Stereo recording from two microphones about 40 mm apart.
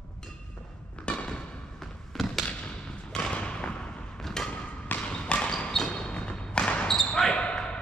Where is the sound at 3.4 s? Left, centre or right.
Left.